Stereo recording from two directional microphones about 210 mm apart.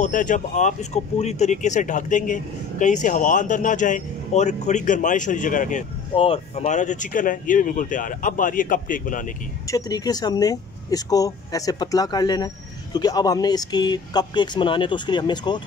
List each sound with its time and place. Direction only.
0.0 s speech: 40° left (ahead or behind)
9.7 s speech: 15° left (ahead or behind)